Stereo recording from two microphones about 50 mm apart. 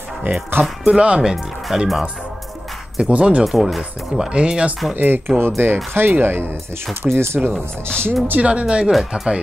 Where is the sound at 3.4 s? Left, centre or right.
Centre.